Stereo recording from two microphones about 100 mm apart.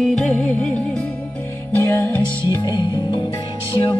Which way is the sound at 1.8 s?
20° left (ahead or behind).